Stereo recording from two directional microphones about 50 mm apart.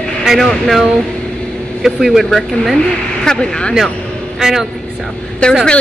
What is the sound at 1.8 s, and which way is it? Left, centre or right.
Speech, centre.